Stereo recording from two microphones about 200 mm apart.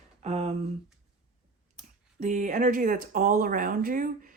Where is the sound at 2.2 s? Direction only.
40° right (ahead or behind).